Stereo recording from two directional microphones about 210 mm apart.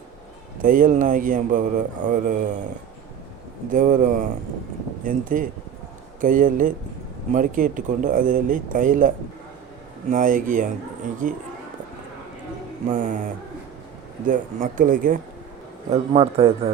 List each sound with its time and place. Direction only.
0.6 s speech: 40° right (ahead or behind)
3.7 s speech: 40° right (ahead or behind)
12.9 s speech: 40° right (ahead or behind)
15.9 s a man's voice: 30° right (ahead or behind)